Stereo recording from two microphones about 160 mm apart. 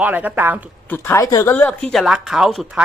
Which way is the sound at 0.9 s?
15° left (ahead or behind).